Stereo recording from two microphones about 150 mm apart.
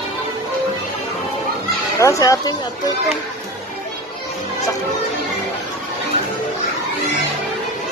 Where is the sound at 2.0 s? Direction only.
20° left (ahead or behind).